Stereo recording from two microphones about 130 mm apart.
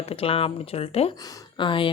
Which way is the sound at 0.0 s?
45° left (ahead or behind).